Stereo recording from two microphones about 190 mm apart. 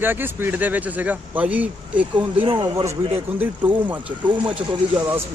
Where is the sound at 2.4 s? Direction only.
25° right (ahead or behind).